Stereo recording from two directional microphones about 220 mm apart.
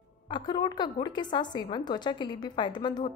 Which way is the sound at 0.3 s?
20° left (ahead or behind).